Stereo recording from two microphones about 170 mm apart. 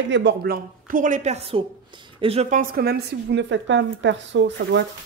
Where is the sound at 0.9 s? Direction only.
50° right (ahead or behind).